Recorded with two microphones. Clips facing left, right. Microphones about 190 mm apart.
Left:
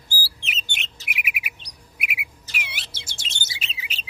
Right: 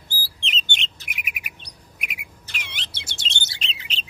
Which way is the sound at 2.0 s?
10° left (ahead or behind).